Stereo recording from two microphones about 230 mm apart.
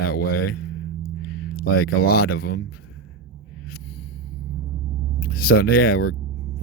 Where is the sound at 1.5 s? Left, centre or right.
Left.